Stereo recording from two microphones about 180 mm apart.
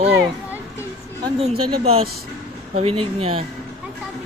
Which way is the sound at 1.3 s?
35° right (ahead or behind).